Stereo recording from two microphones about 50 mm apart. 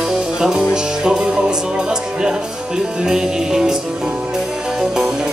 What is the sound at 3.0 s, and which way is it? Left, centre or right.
Music, centre.